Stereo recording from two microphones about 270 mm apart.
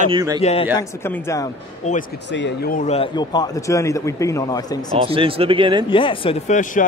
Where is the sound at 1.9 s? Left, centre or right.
Left; by 4.7 s centre.